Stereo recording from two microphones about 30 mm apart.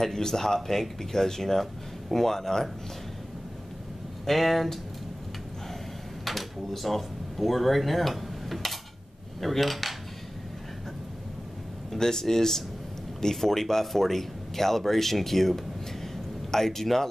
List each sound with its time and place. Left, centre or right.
0.0 s speech: centre
4.3 s cutlery: centre
6.2 s speech: centre
9.4 s cutlery: centre
12.0 s speech: centre